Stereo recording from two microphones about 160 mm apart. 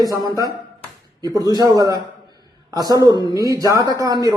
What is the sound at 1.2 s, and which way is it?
Speech, 25° right (ahead or behind).